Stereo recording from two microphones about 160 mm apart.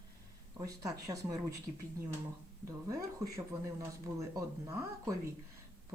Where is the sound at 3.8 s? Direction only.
20° right (ahead or behind).